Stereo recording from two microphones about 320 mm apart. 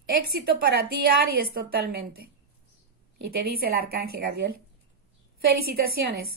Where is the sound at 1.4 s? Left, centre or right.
Right.